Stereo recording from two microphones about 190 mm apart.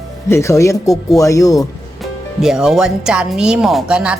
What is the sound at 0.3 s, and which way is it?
Speech, 15° left (ahead or behind).